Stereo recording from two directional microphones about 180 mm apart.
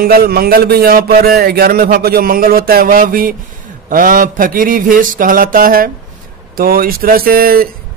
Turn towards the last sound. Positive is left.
turn(degrees=-55)  # may be behind; listen again after turning